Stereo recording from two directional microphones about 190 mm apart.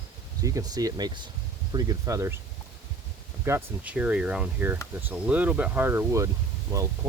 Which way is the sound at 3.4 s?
15° right (ahead or behind).